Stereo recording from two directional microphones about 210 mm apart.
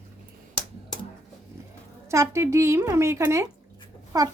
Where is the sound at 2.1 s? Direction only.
15° right (ahead or behind).